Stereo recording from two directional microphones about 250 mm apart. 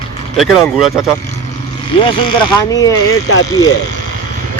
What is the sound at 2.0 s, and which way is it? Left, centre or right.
Speech, centre.